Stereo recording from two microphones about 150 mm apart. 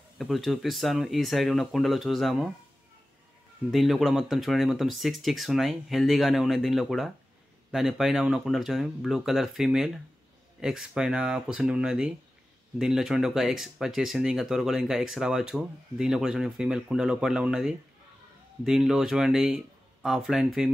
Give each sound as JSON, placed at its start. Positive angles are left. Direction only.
{"t": 0.2, "sound": "speech", "side_deg": 0}
{"t": 3.7, "sound": "speech", "side_deg": 0}